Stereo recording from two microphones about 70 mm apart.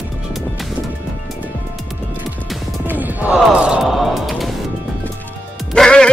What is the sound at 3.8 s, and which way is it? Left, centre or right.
Music, centre.